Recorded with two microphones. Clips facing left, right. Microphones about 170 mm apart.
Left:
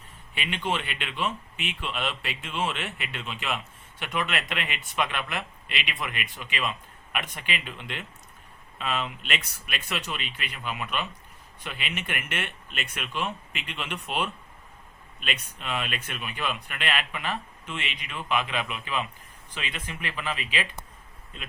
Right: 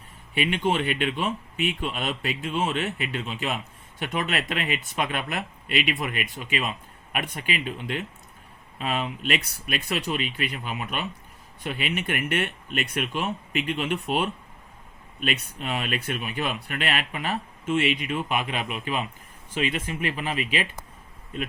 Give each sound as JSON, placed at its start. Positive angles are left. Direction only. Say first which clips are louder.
{"t": 0.3, "sound": "a man's voice", "louder": "right 6 dB", "side_deg": -45}